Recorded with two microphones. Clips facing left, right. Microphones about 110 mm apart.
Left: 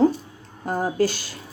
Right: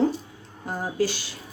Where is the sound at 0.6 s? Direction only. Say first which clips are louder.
Left 4 dB; 45° left (ahead or behind).